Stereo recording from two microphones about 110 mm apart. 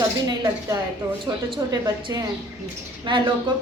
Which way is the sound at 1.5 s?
40° right (ahead or behind).